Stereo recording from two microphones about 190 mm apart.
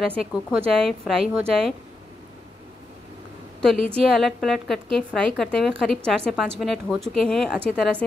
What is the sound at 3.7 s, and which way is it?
Speech, 30° right (ahead or behind).